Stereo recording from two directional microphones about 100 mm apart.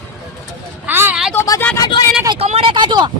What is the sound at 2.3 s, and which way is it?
Speech, 85° right.